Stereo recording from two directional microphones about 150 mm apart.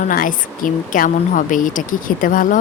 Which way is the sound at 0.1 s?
65° left (ahead or behind).